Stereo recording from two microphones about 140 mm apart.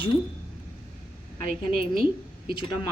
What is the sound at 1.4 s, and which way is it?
Speech, 90° right.